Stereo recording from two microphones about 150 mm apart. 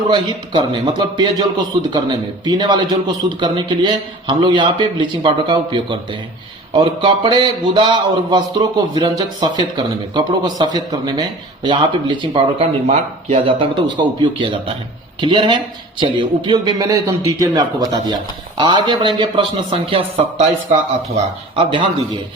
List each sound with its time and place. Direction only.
0.1 s a man's voice: 30° right (ahead or behind)
21.5 s a man's voice: 35° right (ahead or behind)